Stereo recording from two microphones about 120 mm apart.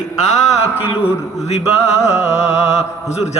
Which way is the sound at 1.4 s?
60° left (ahead or behind).